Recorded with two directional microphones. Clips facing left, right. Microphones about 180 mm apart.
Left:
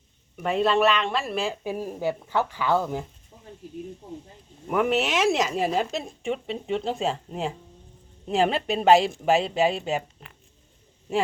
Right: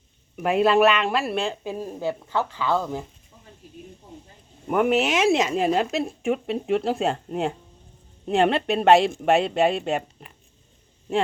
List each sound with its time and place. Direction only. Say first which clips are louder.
0.3 s speech: right 4 dB; 5° right (ahead or behind); by 3.0 s 15° left (ahead or behind)
3.3 s a sound: left 5 dB; 30° left (ahead or behind)
4.7 s speech: right 3 dB; centre (ahead or behind)
8.3 s speech: right 3 dB; centre (ahead or behind)